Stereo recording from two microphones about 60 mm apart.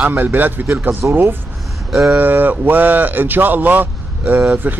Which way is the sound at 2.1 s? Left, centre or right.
Right.